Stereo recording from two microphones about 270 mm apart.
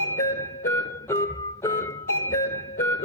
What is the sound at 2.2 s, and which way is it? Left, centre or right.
Music, left.